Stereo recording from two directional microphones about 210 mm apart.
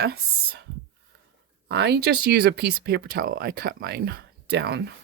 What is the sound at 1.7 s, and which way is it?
Speech, 50° right (ahead or behind).